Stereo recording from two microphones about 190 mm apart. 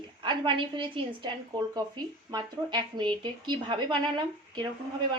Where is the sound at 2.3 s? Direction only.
25° right (ahead or behind).